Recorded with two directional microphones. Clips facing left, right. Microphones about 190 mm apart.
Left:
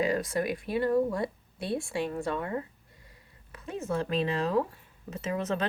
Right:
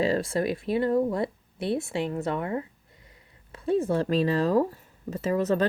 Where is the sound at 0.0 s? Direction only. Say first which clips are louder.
Right 3 dB; 30° right (ahead or behind).